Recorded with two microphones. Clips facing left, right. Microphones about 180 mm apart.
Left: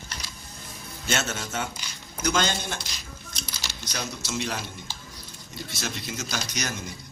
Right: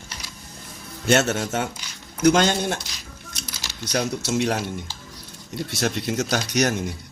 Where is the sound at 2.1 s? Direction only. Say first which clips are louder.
Right 8 dB; 65° right (ahead or behind).